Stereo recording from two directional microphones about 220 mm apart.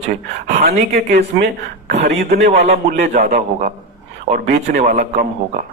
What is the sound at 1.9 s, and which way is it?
A man's voice, 30° right (ahead or behind).